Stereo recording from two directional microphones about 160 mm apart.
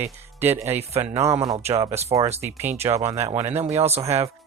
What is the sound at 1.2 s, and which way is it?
Speech, 20° right (ahead or behind).